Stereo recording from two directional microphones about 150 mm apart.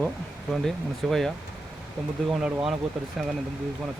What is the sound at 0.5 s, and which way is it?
Speech, centre (ahead or behind).